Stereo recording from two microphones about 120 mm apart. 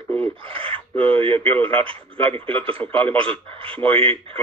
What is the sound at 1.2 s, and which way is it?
Speech, 50° right (ahead or behind).